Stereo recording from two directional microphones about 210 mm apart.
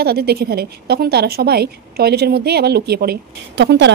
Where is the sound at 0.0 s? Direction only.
50° right (ahead or behind).